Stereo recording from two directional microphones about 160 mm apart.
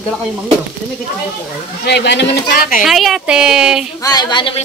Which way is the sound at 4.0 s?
25° left (ahead or behind).